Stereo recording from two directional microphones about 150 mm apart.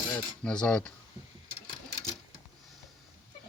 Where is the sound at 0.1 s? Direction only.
5° left (ahead or behind).